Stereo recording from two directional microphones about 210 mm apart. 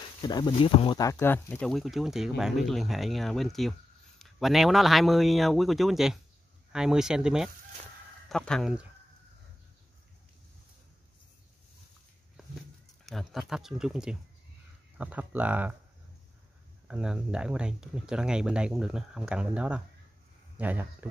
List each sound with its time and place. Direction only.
0.2 s speech: 20° left (ahead or behind)
1.1 s speech: 10° left (ahead or behind)
13.0 s speech: centre (ahead or behind)
16.8 s speech: 5° right (ahead or behind)